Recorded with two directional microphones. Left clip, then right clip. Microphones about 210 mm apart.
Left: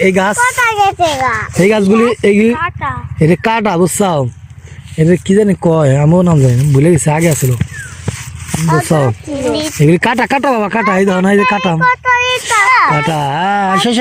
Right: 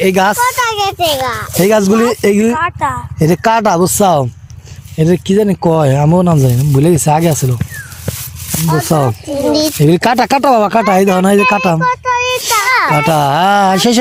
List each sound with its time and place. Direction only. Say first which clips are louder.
0.0 s speech: right 1 dB; 5° right (ahead or behind)
0.3 s speech: left 2 dB; 30° left (ahead or behind)
1.5 s speech: right 1 dB; centre (ahead or behind)
2.5 s speech: right 2 dB; 35° right (ahead or behind)
3.2 s speech: right 1 dB; 5° right (ahead or behind)
8.9 s speech: right 2 dB; 5° right (ahead or behind)
9.5 s speech: right 4 dB; 40° right (ahead or behind)
9.7 s speech: right 1 dB; 5° right (ahead or behind)
11.8 s a sound: left 2 dB; 30° left (ahead or behind)
13.0 s speech: right 4 dB; 15° right (ahead or behind)